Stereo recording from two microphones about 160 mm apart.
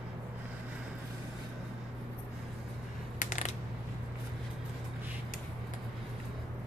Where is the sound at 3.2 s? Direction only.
50° left (ahead or behind).